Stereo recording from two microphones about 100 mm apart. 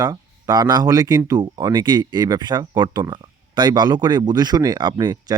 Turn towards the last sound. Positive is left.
turn(degrees=-40)  # may be behind; listen again after turning